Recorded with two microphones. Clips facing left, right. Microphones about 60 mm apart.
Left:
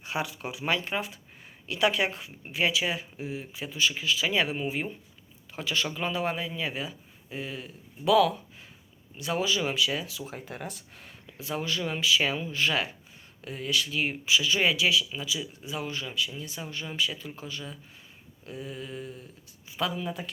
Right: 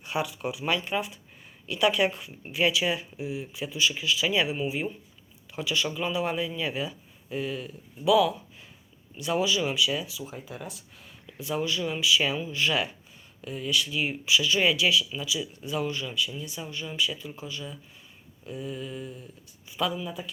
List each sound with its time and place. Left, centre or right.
0.0 s a sound: left
0.9 s speech: left
8.0 s speech: left
9.1 s speech: left
10.2 s speech: left
11.3 s speech: left
15.4 s speech: centre
15.8 s speech: left
19.6 s a sound: left
20.0 s speech: left